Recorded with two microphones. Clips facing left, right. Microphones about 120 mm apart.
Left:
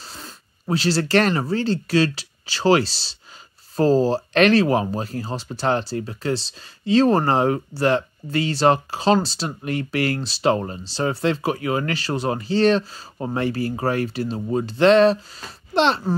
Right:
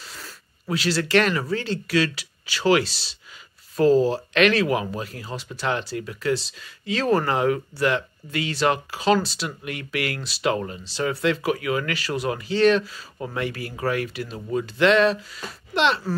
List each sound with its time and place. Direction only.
0.0 s speech: 30° left (ahead or behind)